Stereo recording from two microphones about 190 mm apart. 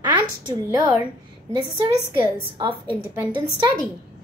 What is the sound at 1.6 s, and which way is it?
A woman's voice, 25° right (ahead or behind).